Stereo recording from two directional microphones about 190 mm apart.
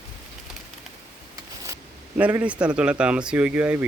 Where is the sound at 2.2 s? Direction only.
10° right (ahead or behind).